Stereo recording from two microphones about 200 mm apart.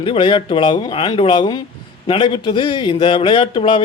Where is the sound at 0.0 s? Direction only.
25° left (ahead or behind).